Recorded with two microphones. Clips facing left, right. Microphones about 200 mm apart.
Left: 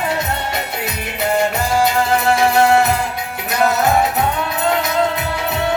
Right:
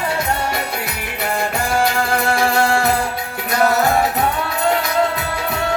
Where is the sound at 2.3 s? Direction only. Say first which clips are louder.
Left 5 dB; 20° left (ahead or behind).